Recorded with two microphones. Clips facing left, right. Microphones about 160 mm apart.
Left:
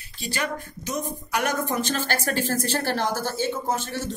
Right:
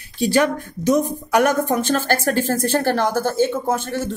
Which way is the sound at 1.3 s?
50° right (ahead or behind).